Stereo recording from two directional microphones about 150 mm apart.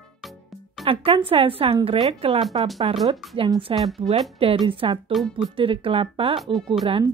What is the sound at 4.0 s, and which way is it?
Speech, 35° right (ahead or behind).